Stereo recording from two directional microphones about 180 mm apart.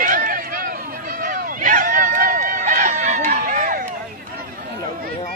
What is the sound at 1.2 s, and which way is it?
Run, 50° right (ahead or behind).